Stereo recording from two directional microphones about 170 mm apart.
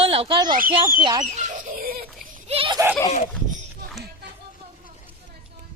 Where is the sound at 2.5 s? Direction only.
35° right (ahead or behind).